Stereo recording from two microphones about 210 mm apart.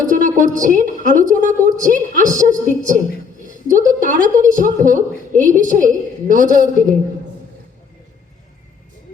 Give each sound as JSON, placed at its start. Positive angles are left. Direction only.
{"t": 0.1, "sound": "a woman's voice", "side_deg": -40}